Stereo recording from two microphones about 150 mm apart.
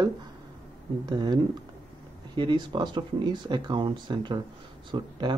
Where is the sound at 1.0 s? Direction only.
25° right (ahead or behind).